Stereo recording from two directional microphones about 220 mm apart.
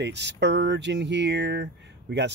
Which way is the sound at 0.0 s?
50° right (ahead or behind).